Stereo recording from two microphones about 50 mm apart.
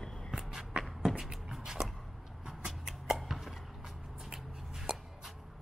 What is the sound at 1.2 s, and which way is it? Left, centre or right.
Beatboxing, centre.